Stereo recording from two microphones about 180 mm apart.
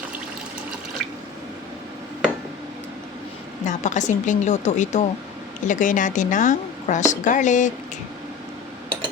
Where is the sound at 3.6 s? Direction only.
40° left (ahead or behind).